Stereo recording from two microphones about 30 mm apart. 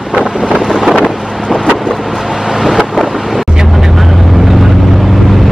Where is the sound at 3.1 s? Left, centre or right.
Centre.